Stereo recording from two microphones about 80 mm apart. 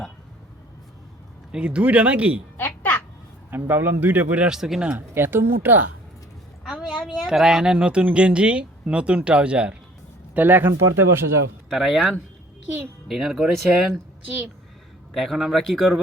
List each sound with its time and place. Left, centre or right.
1.5 s speech: centre
2.6 s a sound: left
3.5 s a man's voice: right
4.4 s speech: centre
4.9 s a man's voice: right
6.7 s a sound: centre
6.9 s a sound: centre
7.3 s speech: centre
10.3 s a man's voice: right
10.7 s speech: right
11.7 s speech: centre
15.1 s speech: centre